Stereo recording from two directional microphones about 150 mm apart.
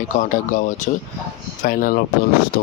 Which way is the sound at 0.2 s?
55° left (ahead or behind).